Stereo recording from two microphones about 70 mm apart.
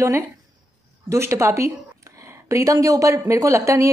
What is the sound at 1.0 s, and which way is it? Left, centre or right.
Speech, right.